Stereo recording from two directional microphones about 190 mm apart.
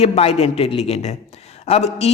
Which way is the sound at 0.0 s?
35° left (ahead or behind).